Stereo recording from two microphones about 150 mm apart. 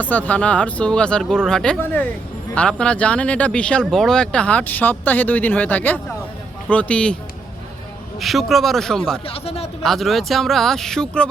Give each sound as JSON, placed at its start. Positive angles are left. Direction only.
{"t": 0.0, "sound": "speech", "side_deg": 10}
{"t": 8.2, "sound": "speech", "side_deg": 0}
{"t": 9.2, "sound": "speech", "side_deg": 40}
{"t": 9.8, "sound": "speech", "side_deg": 0}